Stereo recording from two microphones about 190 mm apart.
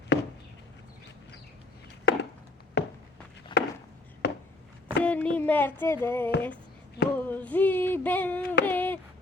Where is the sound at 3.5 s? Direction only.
25° left (ahead or behind).